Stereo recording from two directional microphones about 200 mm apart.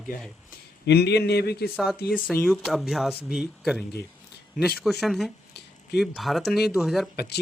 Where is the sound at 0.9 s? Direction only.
55° left (ahead or behind).